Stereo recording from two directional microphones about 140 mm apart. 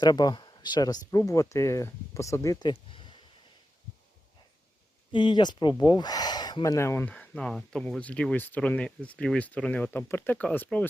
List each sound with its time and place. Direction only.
0.0 s speech: 30° left (ahead or behind)
5.1 s speech: 35° left (ahead or behind); by 7.1 s 20° left (ahead or behind)
7.1 s speech: 5° left (ahead or behind)